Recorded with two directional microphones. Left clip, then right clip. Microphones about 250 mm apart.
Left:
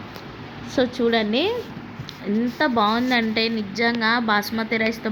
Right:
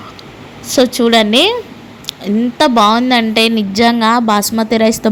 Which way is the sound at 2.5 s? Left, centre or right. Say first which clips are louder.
Right 11 dB; right.